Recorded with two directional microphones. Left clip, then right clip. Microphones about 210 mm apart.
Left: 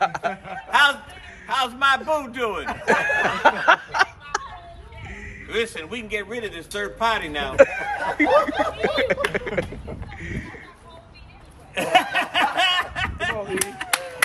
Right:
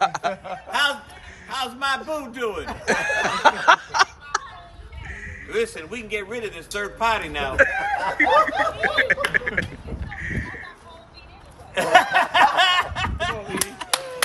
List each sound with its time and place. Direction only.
0.0 s a man's voice: 5° right (ahead or behind)
2.7 s a sound: centre (ahead or behind)
5.5 s a man's voice: centre (ahead or behind)
7.7 s speech: 20° left (ahead or behind)
8.6 s speech: 30° left (ahead or behind)
9.3 s speech: 20° left (ahead or behind)
10.1 s a sound: 20° left (ahead or behind)
11.7 s snicker: 10° right (ahead or behind)